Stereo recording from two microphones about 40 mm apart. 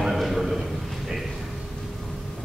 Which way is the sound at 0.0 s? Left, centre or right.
Centre.